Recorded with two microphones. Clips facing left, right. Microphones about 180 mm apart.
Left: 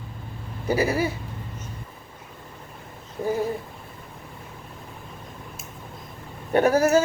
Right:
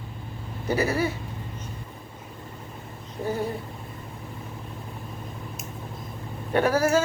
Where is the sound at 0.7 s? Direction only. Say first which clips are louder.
Left 2 dB; 10° left (ahead or behind).